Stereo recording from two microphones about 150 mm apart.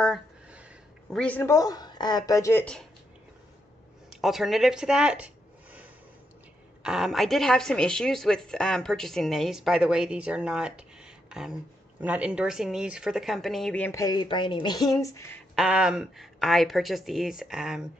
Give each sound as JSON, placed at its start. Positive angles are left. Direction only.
{"t": 0.0, "sound": "a sound", "side_deg": 0}
{"t": 1.1, "sound": "a man's voice", "side_deg": 10}
{"t": 1.5, "sound": "speech", "side_deg": 25}
{"t": 2.6, "sound": "a woman's voice", "side_deg": 5}
{"t": 4.1, "sound": "a woman's voice", "side_deg": 0}
{"t": 11.2, "sound": "a sound", "side_deg": -5}
{"t": 12.0, "sound": "a woman's voice", "side_deg": -10}
{"t": 13.9, "sound": "speech", "side_deg": 25}
{"t": 15.5, "sound": "a woman's voice", "side_deg": -5}